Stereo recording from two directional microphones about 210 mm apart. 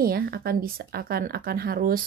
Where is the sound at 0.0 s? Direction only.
45° right (ahead or behind).